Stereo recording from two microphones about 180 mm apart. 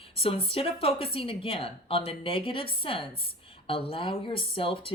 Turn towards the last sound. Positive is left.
turn(degrees=30)  # may be behind; listen again after turning